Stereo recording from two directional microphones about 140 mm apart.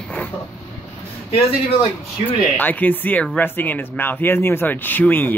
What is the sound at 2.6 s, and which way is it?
Speech, 10° left (ahead or behind).